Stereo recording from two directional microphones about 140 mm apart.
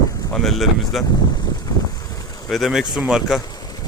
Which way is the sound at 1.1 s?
30° left (ahead or behind).